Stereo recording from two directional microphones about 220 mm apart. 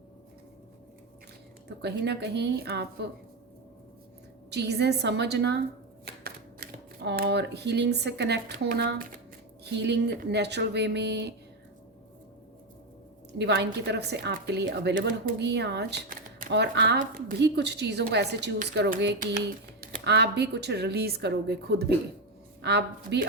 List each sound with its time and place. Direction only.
1.8 s a woman's voice: 50° right (ahead or behind)
4.5 s a woman's voice: 50° right (ahead or behind)
13.4 s a woman's voice: 50° right (ahead or behind)